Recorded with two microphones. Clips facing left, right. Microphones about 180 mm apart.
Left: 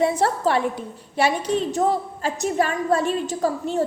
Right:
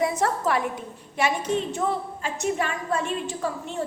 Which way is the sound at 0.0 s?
30° left (ahead or behind).